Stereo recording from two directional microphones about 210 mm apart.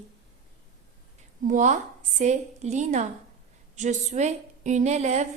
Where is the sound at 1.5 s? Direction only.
35° right (ahead or behind).